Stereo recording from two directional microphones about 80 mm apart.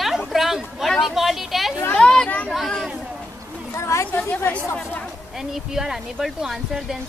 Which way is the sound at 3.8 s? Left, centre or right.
Left.